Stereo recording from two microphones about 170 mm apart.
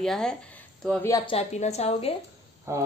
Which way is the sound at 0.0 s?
5° left (ahead or behind).